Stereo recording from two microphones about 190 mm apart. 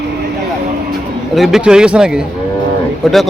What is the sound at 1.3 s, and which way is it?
A man's voice, centre (ahead or behind).